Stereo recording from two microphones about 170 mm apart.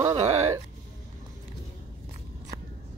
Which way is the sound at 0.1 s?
35° right (ahead or behind).